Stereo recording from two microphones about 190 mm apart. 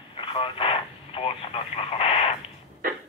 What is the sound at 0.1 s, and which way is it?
Speech, 25° left (ahead or behind).